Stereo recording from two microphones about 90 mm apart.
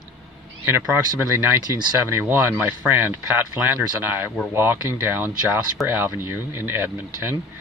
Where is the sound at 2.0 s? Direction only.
25° right (ahead or behind).